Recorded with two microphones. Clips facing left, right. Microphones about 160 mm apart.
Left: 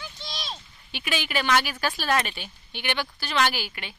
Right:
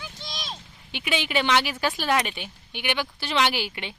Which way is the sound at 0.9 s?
20° right (ahead or behind).